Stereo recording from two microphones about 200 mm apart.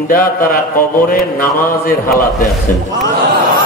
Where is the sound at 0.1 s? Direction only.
45° left (ahead or behind).